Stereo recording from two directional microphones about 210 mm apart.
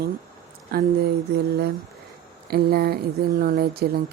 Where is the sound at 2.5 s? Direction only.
50° right (ahead or behind).